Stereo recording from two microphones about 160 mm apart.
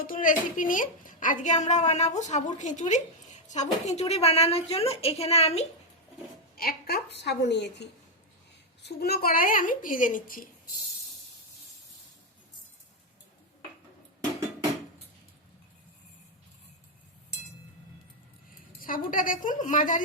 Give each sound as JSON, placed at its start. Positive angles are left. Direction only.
{"t": 0.0, "sound": "a woman's voice", "side_deg": 60}
{"t": 6.6, "sound": "a woman's voice", "side_deg": 70}
{"t": 18.8, "sound": "a woman's voice", "side_deg": 60}